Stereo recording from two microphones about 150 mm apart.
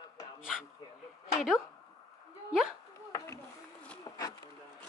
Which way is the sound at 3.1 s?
20° left (ahead or behind).